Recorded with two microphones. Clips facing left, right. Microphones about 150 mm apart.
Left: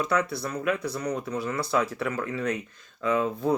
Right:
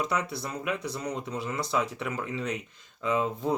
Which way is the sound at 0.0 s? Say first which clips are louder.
Left 4 dB; 20° right (ahead or behind).